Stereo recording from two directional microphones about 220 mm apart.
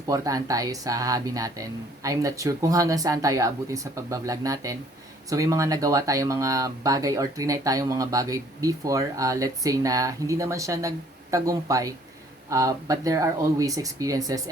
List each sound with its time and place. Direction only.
0.1 s speech: 15° right (ahead or behind)